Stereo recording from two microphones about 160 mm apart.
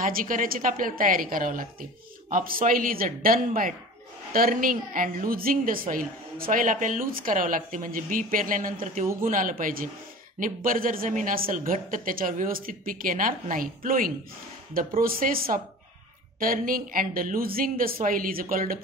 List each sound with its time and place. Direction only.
0.0 s a woman's voice: 60° right (ahead or behind)